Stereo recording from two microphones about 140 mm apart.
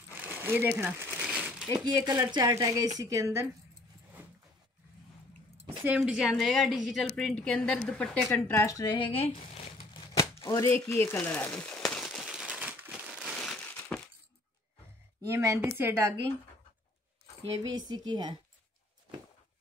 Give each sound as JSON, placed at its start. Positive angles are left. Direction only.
{"t": 0.1, "sound": "crumpling", "side_deg": -15}
{"t": 1.7, "sound": "a woman's voice", "side_deg": -30}
{"t": 5.7, "sound": "a sound", "side_deg": -15}
{"t": 5.9, "sound": "a woman's voice", "side_deg": -5}
{"t": 8.5, "sound": "a woman's voice", "side_deg": 25}
{"t": 9.2, "sound": "speech", "side_deg": 50}
{"t": 10.1, "sound": "a sound", "side_deg": 25}
{"t": 15.2, "sound": "a woman's voice", "side_deg": -20}
{"t": 17.7, "sound": "a woman's voice", "side_deg": -30}